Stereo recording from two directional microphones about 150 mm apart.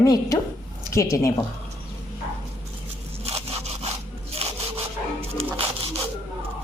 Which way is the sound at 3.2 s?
45° right (ahead or behind).